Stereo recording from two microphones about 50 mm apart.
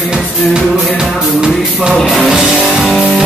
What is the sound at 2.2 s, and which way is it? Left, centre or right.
Music, centre.